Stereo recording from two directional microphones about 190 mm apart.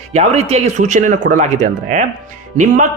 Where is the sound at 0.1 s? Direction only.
35° right (ahead or behind).